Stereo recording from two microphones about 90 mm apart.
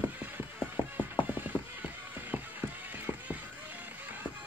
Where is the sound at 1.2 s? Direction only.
60° left (ahead or behind).